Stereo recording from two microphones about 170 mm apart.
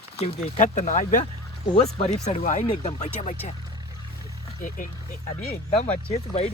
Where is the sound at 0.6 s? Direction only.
45° left (ahead or behind).